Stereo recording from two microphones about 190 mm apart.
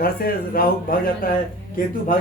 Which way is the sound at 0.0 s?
50° left (ahead or behind).